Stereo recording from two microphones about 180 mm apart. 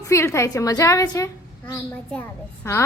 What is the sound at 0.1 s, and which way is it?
A woman's voice, 15° left (ahead or behind).